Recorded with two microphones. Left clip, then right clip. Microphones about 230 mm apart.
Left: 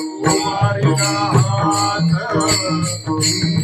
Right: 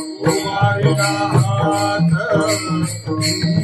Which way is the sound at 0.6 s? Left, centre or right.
Right.